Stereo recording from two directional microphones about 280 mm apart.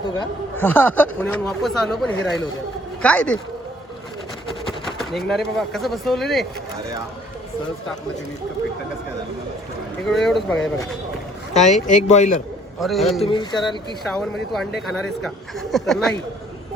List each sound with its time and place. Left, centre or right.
0.2 s speech: centre
4.9 s speech: centre
10.1 s speech: centre
11.5 s speech: left
12.8 s speech: centre
13.2 s speech: centre
14.8 s speech: centre